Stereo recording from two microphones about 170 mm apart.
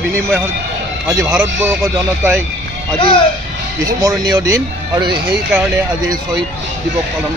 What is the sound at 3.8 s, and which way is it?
Speech, 20° right (ahead or behind).